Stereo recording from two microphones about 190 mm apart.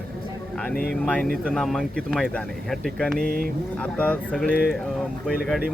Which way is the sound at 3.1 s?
50° right (ahead or behind).